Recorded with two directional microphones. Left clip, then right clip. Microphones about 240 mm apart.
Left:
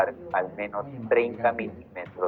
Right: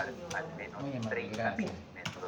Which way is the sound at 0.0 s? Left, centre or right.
Left.